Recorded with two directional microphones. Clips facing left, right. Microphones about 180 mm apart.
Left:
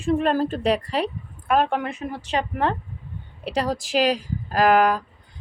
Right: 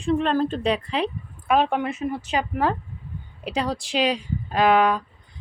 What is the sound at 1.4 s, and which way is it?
A woman's voice, centre (ahead or behind).